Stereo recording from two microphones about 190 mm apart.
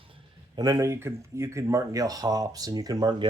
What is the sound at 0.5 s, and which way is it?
Speech, 20° right (ahead or behind).